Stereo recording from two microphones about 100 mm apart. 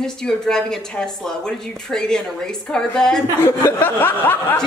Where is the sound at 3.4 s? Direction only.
25° left (ahead or behind).